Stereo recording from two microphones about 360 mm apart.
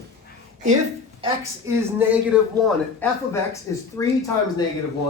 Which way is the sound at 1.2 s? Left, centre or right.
Centre.